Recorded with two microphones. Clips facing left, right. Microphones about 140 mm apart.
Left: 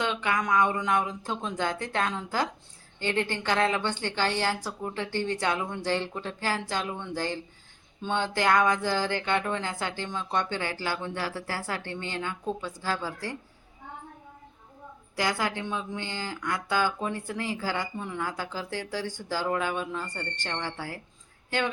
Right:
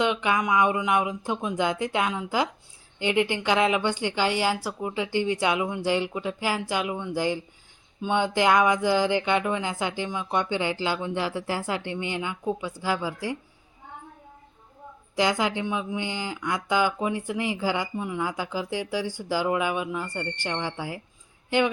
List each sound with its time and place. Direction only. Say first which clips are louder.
0.0 s speech: right 4 dB; 15° right (ahead or behind)
15.1 s speech: right 5 dB; 20° right (ahead or behind)